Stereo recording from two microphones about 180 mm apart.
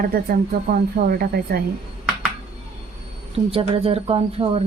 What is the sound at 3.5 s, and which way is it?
Speech, 30° right (ahead or behind).